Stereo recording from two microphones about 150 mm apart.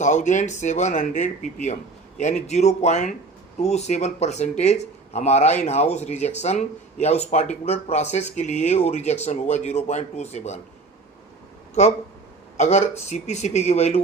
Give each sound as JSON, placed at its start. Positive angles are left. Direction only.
{"t": 0.0, "sound": "speech", "side_deg": 55}
{"t": 11.7, "sound": "speech", "side_deg": 45}